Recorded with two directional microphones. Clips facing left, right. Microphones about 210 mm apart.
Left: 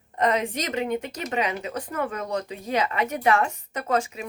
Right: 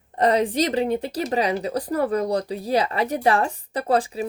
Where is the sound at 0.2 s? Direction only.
35° right (ahead or behind).